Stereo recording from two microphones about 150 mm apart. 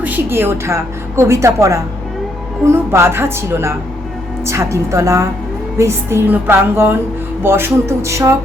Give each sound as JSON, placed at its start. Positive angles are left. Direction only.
{"t": 0.0, "sound": "a woman's voice", "side_deg": -15}